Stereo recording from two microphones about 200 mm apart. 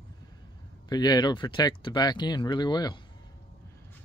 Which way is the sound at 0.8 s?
20° left (ahead or behind).